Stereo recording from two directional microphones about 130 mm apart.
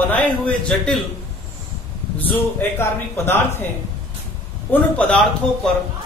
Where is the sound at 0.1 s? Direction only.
5° left (ahead or behind).